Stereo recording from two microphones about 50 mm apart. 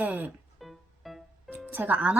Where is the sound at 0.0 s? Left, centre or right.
Right.